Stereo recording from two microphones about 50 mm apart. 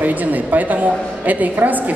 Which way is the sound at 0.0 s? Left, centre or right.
Right.